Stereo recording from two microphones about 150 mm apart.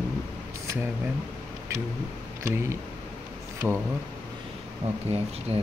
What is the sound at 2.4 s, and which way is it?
Speech, 20° right (ahead or behind).